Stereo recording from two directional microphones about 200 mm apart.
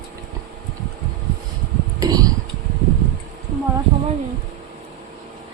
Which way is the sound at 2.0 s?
20° right (ahead or behind).